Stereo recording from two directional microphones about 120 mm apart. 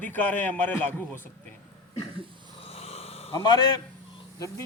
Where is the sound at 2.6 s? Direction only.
55° left (ahead or behind).